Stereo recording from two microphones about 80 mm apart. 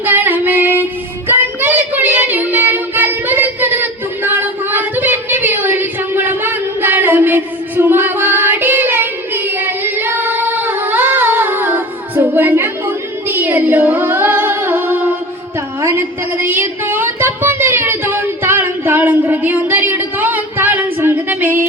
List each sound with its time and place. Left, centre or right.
0.0 s female singing: right
1.3 s child singing: right
15.8 s a sound: right